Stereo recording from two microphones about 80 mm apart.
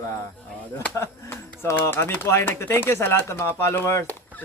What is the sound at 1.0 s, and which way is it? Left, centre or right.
Speech, left.